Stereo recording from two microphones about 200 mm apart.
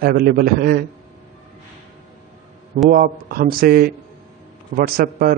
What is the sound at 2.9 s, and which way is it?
Speech, 45° right (ahead or behind).